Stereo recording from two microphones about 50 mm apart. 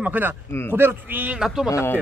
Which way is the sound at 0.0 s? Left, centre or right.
Right.